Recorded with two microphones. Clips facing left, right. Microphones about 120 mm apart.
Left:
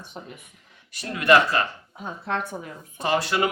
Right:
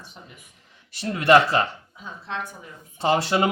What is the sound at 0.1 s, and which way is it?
Speech, 55° left (ahead or behind).